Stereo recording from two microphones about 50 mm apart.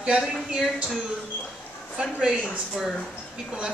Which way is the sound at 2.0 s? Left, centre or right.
Centre.